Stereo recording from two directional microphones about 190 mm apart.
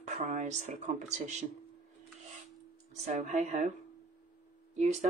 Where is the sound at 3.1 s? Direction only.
40° right (ahead or behind).